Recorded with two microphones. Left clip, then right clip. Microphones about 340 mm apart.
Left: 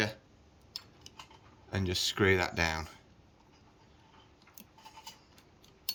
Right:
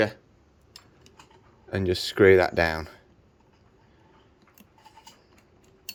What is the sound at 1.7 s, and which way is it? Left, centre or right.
Speech, centre.